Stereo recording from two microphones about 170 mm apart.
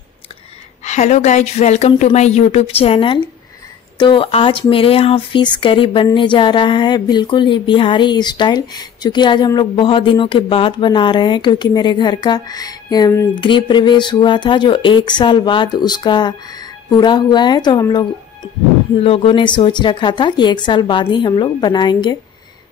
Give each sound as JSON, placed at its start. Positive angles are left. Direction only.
{"t": 0.8, "sound": "speech", "side_deg": 45}
{"t": 13.4, "sound": "speech", "side_deg": 30}
{"t": 19.0, "sound": "speech", "side_deg": 35}